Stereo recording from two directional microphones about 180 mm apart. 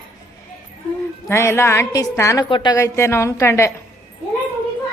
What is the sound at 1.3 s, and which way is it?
A woman's voice, 15° left (ahead or behind).